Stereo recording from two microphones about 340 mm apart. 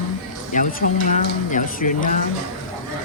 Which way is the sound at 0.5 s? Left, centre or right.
Left.